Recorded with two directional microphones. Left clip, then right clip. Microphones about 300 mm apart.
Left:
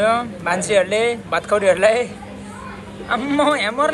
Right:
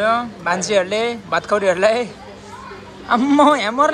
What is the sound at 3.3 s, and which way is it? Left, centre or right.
Speech, right.